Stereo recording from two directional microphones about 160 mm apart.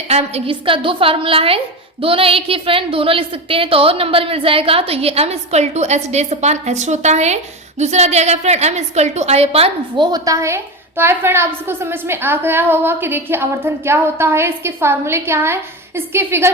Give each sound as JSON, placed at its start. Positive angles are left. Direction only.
{"t": 0.1, "sound": "a woman's voice", "side_deg": -40}
{"t": 10.1, "sound": "a woman's voice", "side_deg": -20}